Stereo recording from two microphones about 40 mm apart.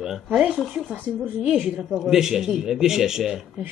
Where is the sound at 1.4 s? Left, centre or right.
Right.